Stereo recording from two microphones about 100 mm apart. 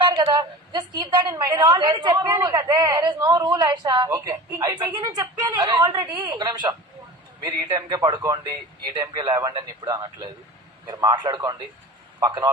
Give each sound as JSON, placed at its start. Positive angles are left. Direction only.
{"t": 0.1, "sound": "a woman's voice", "side_deg": -45}